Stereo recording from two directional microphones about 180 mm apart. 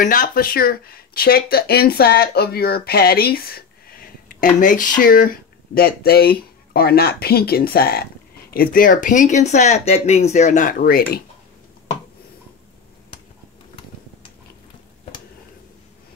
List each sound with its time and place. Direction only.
0.0 s speech: 50° left (ahead or behind)